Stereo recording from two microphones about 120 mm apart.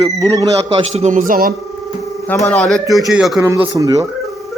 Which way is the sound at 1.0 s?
80° right.